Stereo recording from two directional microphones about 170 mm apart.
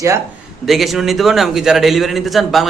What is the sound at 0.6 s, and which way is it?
A man's voice, centre (ahead or behind).